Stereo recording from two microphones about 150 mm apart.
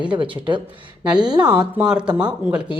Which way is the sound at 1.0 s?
5° right (ahead or behind).